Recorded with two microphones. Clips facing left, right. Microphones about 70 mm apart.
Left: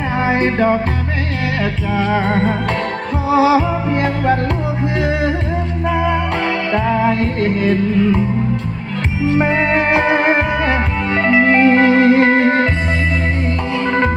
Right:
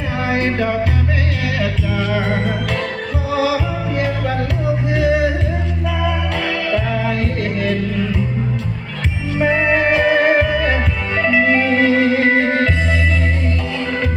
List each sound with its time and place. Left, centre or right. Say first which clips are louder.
0.3 s music: left 4 dB; left
2.0 s music: left 4 dB; left
6.7 s music: left 6 dB; left
9.4 s music: right 3 dB; left